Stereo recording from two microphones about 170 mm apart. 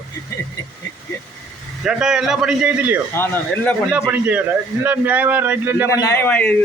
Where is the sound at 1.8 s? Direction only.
5° right (ahead or behind).